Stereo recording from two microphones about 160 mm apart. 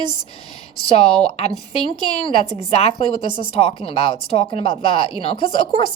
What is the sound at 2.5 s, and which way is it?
Speech, 40° left (ahead or behind).